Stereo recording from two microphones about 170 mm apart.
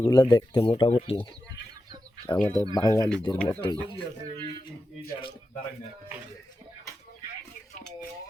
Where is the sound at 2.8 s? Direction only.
20° left (ahead or behind).